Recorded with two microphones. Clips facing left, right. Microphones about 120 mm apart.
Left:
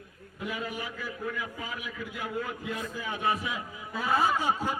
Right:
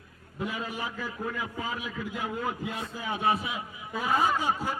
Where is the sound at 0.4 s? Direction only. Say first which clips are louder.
Right 1 dB; 35° right (ahead or behind).